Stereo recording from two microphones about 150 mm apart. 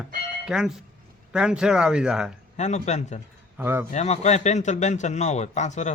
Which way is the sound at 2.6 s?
50° left (ahead or behind).